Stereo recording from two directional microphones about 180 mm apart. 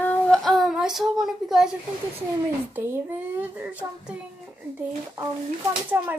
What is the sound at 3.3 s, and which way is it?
Speech, 10° right (ahead or behind).